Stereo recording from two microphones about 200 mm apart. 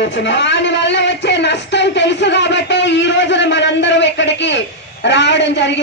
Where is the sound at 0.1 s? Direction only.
65° left (ahead or behind).